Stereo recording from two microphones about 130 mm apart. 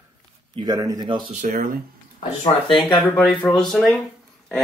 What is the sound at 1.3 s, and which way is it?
Speech, 80° right.